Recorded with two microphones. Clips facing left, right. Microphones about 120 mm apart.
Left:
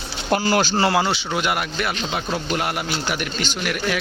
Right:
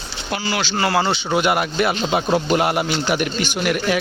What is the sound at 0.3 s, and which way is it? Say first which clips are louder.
Speech: left 5 dB; 45° left (ahead or behind).